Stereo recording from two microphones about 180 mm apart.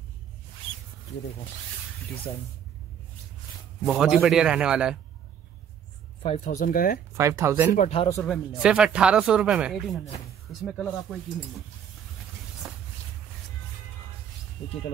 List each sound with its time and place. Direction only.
3.8 s speech: 5° right (ahead or behind)
6.2 s speech: 40° left (ahead or behind)
7.2 s speech: 15° right (ahead or behind)
7.7 s speech: 40° left (ahead or behind)
8.2 s speech: centre (ahead or behind)
12.6 s a sound: centre (ahead or behind)